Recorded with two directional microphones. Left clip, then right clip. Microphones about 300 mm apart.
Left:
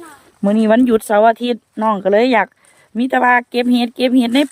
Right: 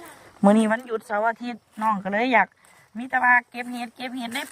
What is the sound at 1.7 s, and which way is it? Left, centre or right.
Speech, left.